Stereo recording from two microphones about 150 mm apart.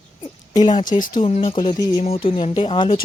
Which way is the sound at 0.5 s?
30° left (ahead or behind).